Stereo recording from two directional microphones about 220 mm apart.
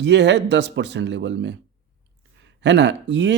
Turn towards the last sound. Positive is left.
turn(degrees=-50)  # may be behind; listen again after turning